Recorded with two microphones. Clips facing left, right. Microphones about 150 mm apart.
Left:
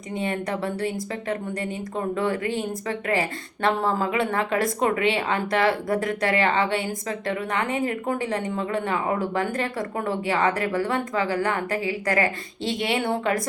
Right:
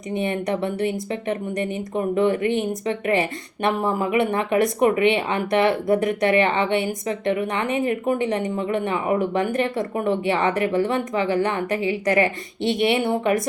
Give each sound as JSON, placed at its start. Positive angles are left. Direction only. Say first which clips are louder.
{"t": 0.1, "sound": "a woman's voice", "louder": "right 4 dB", "side_deg": -20}